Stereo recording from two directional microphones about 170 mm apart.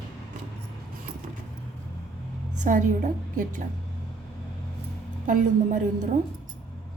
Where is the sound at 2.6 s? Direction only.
50° right (ahead or behind).